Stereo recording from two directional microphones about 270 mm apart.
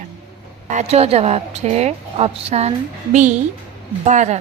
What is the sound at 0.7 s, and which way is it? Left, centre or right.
A woman's voice, right.